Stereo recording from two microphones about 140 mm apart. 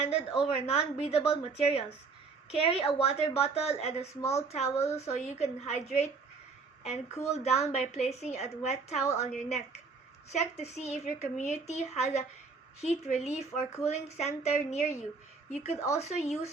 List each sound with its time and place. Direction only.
0.4 s a woman's voice: 45° left (ahead or behind)